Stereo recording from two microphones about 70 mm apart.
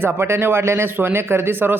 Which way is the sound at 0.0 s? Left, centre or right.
Right.